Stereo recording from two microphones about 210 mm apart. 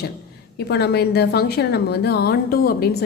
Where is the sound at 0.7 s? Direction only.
50° left (ahead or behind).